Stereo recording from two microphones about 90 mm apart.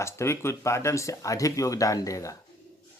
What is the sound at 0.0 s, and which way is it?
Speech, 30° left (ahead or behind).